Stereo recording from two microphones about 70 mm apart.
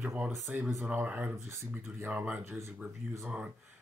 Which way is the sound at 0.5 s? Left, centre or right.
Centre.